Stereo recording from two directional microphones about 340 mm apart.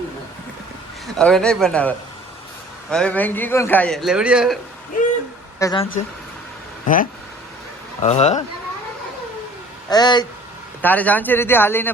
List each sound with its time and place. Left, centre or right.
1.2 s a man's voice: centre
2.9 s a man's voice: centre
5.5 s speech: centre
6.8 s speech: left
9.9 s a man's voice: centre